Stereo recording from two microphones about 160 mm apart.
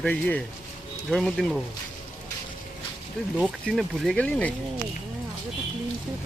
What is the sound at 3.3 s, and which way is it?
Speech, centre (ahead or behind).